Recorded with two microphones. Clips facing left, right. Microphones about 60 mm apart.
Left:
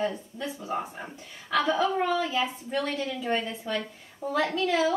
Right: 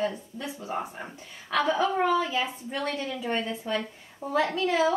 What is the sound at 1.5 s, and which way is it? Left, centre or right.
A woman's voice, right.